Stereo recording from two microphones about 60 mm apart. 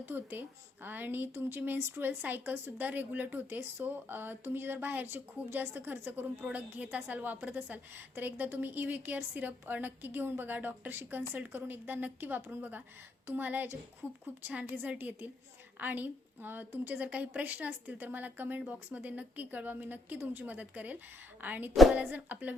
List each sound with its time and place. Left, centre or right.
0.0 s a woman's voice: right
3.4 s a woman's voice: right
14.4 s a woman's voice: right